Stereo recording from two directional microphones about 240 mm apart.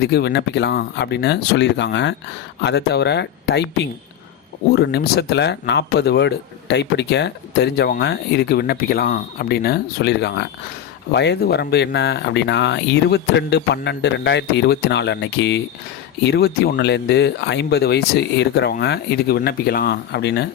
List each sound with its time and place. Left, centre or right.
0.0 s speech: left